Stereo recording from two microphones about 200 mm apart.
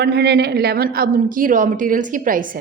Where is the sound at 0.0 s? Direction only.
55° right (ahead or behind).